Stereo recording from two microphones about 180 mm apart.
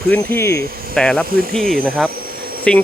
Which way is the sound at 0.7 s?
55° right (ahead or behind).